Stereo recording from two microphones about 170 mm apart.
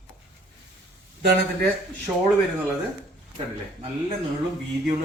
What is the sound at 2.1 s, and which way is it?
Speech, 15° right (ahead or behind).